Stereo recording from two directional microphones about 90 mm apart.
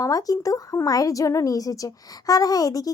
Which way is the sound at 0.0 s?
40° left (ahead or behind).